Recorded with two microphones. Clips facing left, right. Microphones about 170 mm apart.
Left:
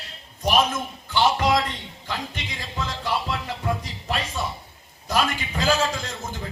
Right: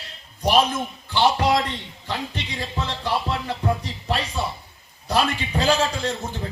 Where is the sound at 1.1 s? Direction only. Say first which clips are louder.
Right 1 dB; 35° right (ahead or behind).